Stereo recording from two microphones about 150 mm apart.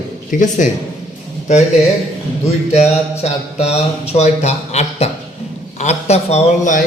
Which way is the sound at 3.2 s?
45° left (ahead or behind).